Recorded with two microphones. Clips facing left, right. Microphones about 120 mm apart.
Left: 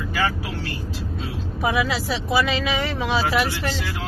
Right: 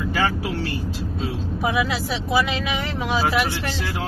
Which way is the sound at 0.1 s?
30° right (ahead or behind).